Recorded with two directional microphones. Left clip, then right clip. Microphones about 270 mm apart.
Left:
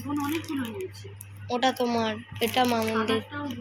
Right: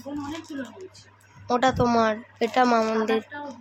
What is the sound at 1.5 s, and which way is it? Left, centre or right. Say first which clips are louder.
Speech: right 4 dB; right.